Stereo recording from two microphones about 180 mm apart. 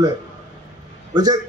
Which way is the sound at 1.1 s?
20° right (ahead or behind).